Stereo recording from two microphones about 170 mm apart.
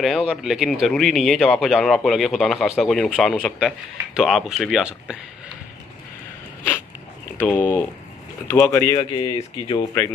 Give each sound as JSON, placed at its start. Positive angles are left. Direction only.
{"t": 0.0, "sound": "speech", "side_deg": -5}
{"t": 7.3, "sound": "speech", "side_deg": 10}
{"t": 9.1, "sound": "speech", "side_deg": 30}